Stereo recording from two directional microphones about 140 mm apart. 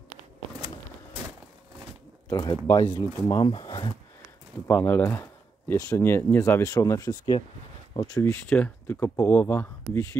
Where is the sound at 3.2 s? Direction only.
35° left (ahead or behind).